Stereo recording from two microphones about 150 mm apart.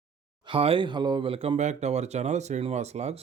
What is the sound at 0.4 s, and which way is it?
Speech, 35° right (ahead or behind).